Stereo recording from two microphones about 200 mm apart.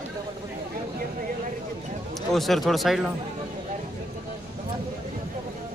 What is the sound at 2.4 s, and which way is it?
Speech, centre (ahead or behind).